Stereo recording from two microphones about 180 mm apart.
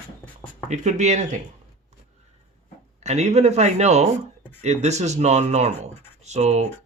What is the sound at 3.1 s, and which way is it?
Speech, 40° right (ahead or behind).